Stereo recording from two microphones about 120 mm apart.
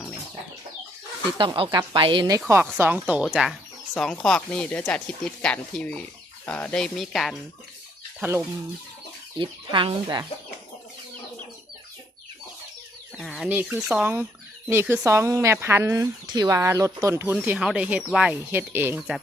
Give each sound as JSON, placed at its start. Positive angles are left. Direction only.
{"t": 1.4, "sound": "speech", "side_deg": -45}
{"t": 2.5, "sound": "speech", "side_deg": -20}
{"t": 9.4, "sound": "speech", "side_deg": -45}
{"t": 13.1, "sound": "chicken", "side_deg": 0}
{"t": 13.5, "sound": "speech", "side_deg": -15}
{"t": 13.7, "sound": "speech", "side_deg": -5}
{"t": 14.7, "sound": "speech", "side_deg": -20}
{"t": 17.4, "sound": "speech", "side_deg": -10}
{"t": 18.9, "sound": "speech", "side_deg": -5}